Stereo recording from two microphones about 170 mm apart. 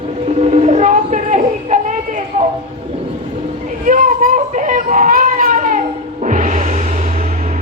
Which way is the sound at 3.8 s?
50° right (ahead or behind).